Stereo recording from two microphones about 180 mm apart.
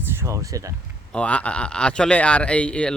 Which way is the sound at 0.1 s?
15° right (ahead or behind).